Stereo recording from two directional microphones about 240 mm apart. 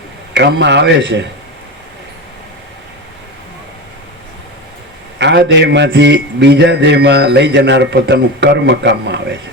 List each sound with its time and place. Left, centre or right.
0.3 s a man's voice: right
5.2 s a man's voice: right